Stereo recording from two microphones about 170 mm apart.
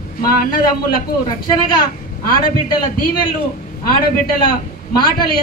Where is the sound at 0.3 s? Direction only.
55° left (ahead or behind).